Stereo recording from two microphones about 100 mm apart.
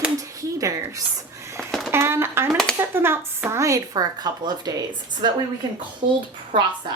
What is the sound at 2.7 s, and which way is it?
Speech, 25° right (ahead or behind).